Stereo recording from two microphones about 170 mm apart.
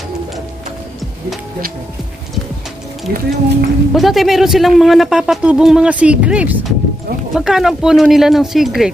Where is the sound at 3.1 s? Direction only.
65° right (ahead or behind).